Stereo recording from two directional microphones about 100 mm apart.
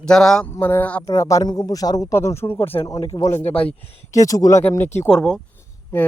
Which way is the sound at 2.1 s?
25° left (ahead or behind).